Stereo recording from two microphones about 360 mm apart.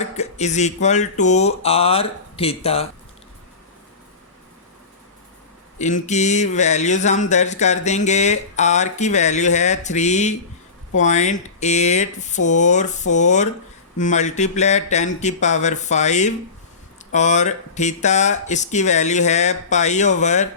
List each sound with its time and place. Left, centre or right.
0.0 s speech: centre
5.8 s speech: centre